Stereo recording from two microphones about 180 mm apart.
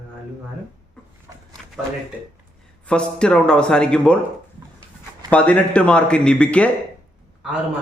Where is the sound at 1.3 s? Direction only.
20° right (ahead or behind).